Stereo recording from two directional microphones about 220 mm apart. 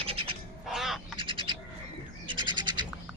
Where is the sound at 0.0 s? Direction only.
25° right (ahead or behind).